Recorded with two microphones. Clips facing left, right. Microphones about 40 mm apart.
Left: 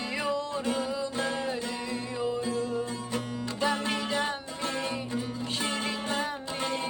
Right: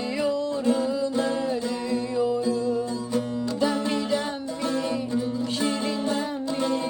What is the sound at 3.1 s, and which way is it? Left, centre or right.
Music, left.